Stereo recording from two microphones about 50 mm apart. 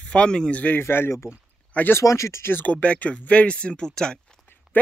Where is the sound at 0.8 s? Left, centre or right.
Left.